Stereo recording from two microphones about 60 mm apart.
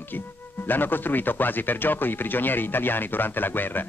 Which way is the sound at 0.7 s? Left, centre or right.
Left.